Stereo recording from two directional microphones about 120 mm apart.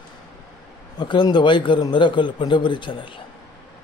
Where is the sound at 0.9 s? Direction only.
40° left (ahead or behind).